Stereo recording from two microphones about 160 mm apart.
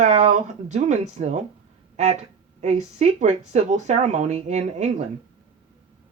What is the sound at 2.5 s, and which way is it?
Speech, 45° right (ahead or behind).